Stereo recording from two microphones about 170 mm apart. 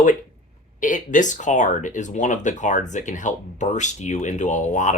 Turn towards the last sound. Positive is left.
turn(degrees=45)  # may be behind; listen again after turning